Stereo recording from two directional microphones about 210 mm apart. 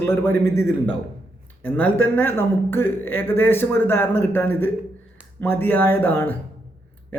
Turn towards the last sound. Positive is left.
turn(degrees=10)  # may be behind; listen again after turning